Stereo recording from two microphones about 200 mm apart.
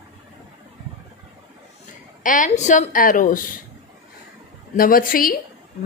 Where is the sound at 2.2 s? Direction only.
40° left (ahead or behind).